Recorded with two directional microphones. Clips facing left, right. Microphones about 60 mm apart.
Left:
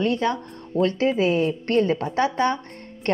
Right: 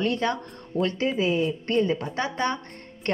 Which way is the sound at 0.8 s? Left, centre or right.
Left.